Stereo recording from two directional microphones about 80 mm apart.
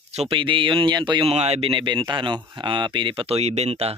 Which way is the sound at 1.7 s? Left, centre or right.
Right.